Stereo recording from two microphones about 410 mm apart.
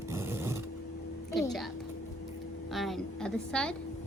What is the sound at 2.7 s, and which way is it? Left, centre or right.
A woman's voice, centre.